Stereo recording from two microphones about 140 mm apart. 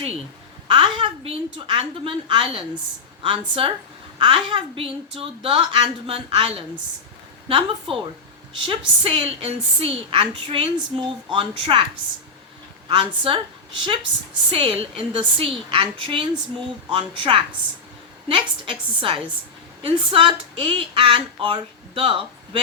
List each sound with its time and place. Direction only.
0.7 s a woman's voice: 35° right (ahead or behind)
12.9 s a woman's voice: 35° right (ahead or behind)